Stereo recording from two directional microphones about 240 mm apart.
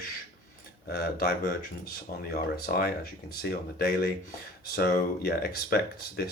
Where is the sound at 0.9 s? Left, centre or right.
Left.